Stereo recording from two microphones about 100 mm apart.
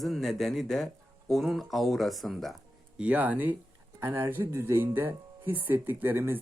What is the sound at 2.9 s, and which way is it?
Speech, 15° right (ahead or behind).